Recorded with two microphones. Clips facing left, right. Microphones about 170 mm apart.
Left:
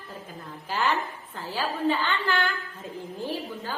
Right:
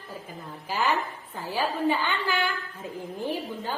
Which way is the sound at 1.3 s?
15° right (ahead or behind).